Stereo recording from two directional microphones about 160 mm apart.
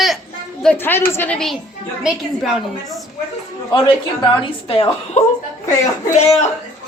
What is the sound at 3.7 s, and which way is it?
Speech, 30° left (ahead or behind).